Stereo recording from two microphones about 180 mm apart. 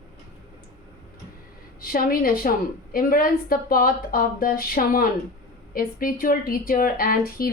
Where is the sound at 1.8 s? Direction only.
50° left (ahead or behind).